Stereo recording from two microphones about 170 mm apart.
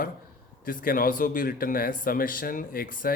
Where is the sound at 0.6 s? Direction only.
55° left (ahead or behind).